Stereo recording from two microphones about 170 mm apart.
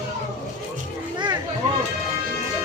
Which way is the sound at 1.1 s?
25° right (ahead or behind).